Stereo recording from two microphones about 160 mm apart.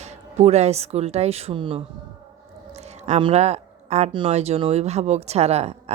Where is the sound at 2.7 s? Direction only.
45° right (ahead or behind).